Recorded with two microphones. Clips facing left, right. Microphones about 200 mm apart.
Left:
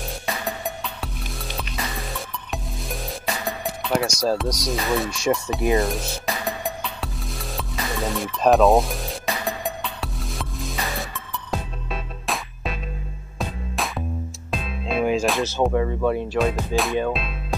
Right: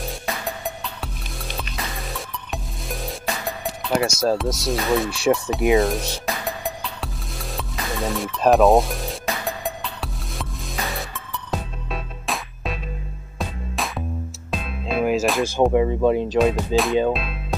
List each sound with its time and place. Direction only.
0.0 s music: centre (ahead or behind)
15.4 s speech: 15° right (ahead or behind)
16.5 s music: centre (ahead or behind)
17.1 s speech: centre (ahead or behind)